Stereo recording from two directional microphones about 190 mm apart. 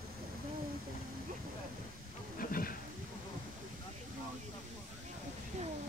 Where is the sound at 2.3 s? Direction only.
50° left (ahead or behind).